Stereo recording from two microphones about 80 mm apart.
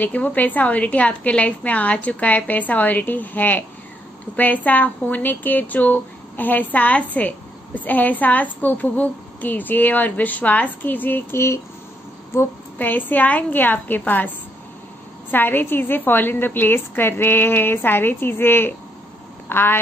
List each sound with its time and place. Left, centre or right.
0.0 s a woman's voice: centre
15.3 s speech: left